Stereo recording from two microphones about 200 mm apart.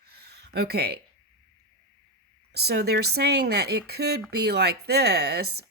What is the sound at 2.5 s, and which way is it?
A woman's voice, 55° right (ahead or behind).